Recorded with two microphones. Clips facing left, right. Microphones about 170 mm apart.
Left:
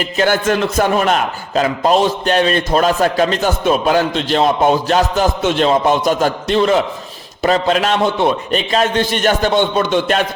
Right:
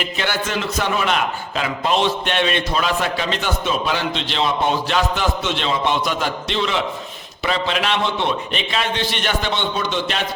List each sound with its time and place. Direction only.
0.0 s a man's voice: 45° left (ahead or behind)